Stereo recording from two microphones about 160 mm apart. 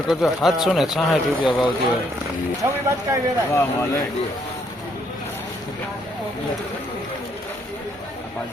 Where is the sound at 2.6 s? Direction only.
15° right (ahead or behind).